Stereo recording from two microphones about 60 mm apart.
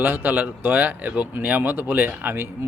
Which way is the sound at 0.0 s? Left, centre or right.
Right.